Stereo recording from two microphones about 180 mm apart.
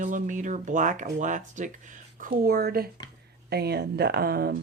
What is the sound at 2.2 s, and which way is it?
Speech, 55° right (ahead or behind).